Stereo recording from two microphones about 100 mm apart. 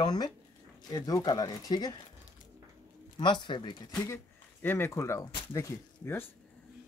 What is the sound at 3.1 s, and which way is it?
Speech, 50° left (ahead or behind).